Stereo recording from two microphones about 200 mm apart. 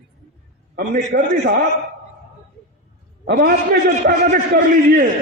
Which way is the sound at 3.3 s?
50° right (ahead or behind).